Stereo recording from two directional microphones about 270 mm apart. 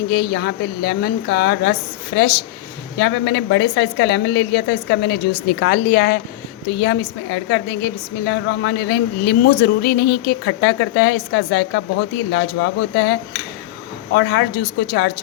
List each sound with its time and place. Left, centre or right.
0.1 s a woman's voice: left